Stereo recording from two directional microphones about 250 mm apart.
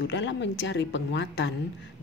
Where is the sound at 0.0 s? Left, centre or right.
Left.